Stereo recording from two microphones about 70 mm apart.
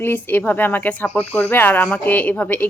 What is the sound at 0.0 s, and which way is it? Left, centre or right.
Speech, left.